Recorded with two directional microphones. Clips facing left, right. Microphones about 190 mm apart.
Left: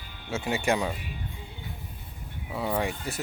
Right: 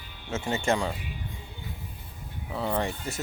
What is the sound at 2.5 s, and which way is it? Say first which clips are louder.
Speech: even; 5° left (ahead or behind).